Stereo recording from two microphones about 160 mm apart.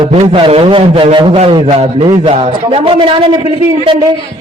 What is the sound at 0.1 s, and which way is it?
A man's voice, 40° right (ahead or behind).